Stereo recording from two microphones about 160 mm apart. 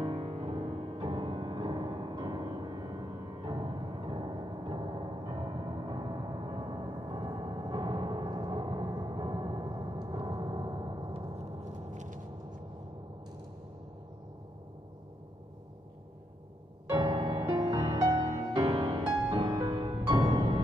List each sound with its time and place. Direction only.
0.0 s music: 30° right (ahead or behind)
11.9 s a sound: 50° right (ahead or behind)
16.9 s music: 30° right (ahead or behind)